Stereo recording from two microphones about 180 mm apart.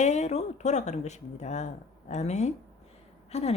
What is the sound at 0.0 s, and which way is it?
Speech, 40° left (ahead or behind).